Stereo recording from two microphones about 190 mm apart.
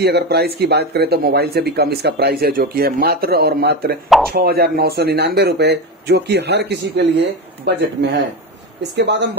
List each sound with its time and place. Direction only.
0.0 s speech: 60° right (ahead or behind)